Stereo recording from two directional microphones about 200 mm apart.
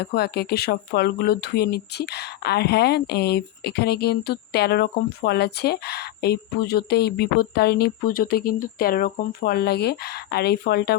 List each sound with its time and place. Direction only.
0.0 s speech: 55° left (ahead or behind)